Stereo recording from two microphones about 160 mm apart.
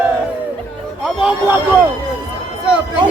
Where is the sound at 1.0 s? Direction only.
5° right (ahead or behind).